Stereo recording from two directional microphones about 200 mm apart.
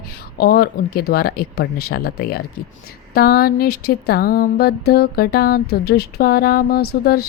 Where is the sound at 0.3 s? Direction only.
50° left (ahead or behind).